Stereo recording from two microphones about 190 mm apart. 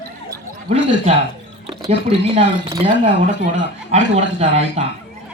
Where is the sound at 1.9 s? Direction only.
35° right (ahead or behind).